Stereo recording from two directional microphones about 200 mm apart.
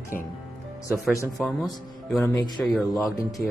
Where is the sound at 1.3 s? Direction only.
Centre (ahead or behind).